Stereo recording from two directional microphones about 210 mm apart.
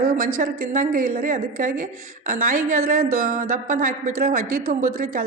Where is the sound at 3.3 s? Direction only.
40° right (ahead or behind).